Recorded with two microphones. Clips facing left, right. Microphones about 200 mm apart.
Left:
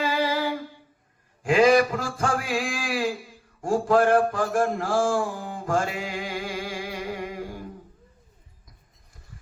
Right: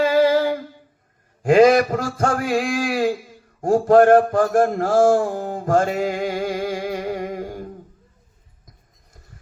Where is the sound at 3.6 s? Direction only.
40° right (ahead or behind).